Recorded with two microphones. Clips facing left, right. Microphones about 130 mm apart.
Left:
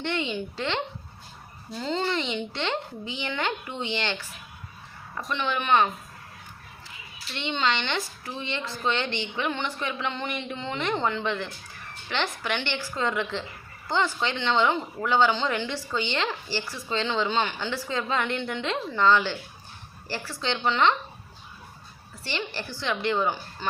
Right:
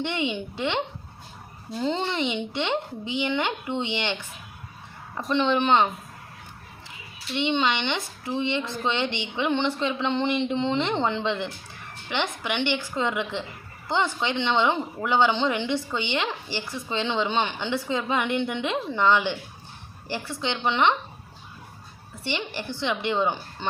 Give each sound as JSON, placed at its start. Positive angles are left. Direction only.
{"t": 0.0, "sound": "a woman's voice", "side_deg": -15}
{"t": 1.8, "sound": "speech", "side_deg": -20}
{"t": 5.3, "sound": "speech", "side_deg": -30}
{"t": 7.3, "sound": "a woman's voice", "side_deg": -15}
{"t": 22.2, "sound": "speech", "side_deg": -20}